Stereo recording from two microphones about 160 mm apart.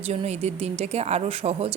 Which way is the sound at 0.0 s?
40° right (ahead or behind).